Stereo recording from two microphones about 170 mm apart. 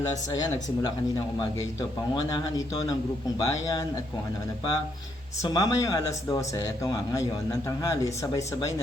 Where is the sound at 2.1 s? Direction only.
20° left (ahead or behind).